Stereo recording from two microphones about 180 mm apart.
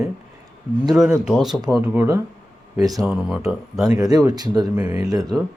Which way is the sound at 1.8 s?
15° right (ahead or behind).